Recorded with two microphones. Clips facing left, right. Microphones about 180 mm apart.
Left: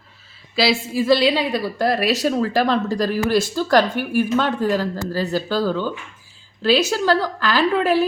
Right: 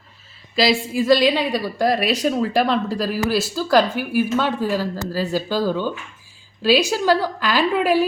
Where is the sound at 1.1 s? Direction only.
15° right (ahead or behind).